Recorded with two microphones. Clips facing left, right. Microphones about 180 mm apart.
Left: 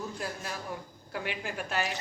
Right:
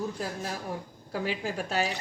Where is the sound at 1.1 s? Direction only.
40° right (ahead or behind).